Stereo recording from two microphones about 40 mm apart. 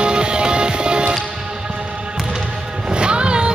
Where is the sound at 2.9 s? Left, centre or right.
Right.